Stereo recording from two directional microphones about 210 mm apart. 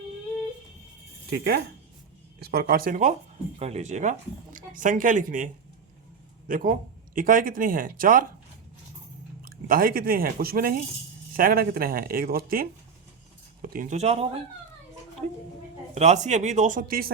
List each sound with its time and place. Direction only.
1.3 s speech: 45° right (ahead or behind)
6.5 s speech: 40° right (ahead or behind)
9.4 s speech: 45° right (ahead or behind)
16.0 s speech: 35° right (ahead or behind)